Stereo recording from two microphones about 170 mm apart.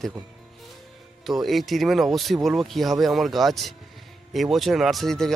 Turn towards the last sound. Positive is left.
turn(degrees=0)  # may be behind; listen again after turning